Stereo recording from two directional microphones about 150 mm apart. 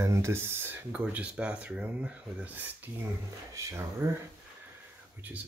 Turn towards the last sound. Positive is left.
turn(degrees=-15)  # may be behind; listen again after turning